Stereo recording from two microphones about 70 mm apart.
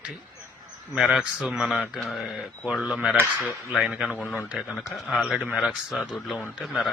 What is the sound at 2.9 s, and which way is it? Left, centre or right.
A man's voice, centre.